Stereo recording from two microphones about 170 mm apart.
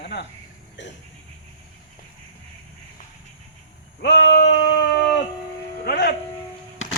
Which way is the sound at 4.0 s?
90° left.